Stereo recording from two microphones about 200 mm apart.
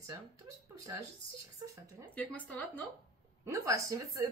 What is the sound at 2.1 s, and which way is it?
Speech, 5° left (ahead or behind).